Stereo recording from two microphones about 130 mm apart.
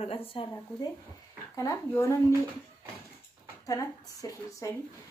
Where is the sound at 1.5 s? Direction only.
25° left (ahead or behind).